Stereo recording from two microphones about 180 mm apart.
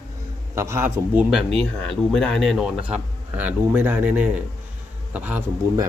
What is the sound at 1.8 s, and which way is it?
Speech, 5° left (ahead or behind).